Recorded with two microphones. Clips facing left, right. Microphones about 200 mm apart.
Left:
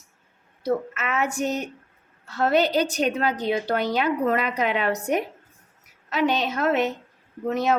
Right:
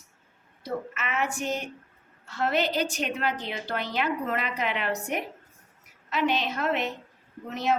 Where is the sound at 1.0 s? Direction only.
40° left (ahead or behind).